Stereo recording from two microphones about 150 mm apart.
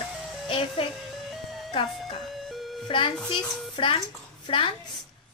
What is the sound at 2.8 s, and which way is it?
A woman's voice, 35° left (ahead or behind).